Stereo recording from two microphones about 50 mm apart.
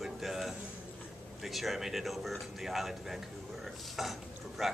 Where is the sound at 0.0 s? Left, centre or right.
Centre.